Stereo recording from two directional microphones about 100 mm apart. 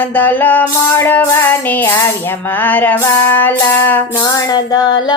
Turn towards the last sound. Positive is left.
turn(degrees=45)  # may be behind; listen again after turning